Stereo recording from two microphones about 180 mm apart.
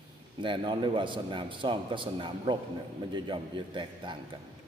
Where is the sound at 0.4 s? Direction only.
25° right (ahead or behind).